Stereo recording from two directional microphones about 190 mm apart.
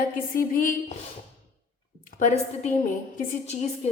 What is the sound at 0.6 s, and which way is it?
Speech, 45° left (ahead or behind).